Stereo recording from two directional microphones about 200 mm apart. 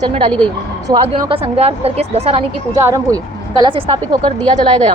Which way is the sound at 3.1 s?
25° right (ahead or behind).